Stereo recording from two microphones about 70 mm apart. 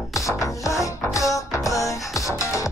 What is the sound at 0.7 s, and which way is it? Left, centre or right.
Music, left.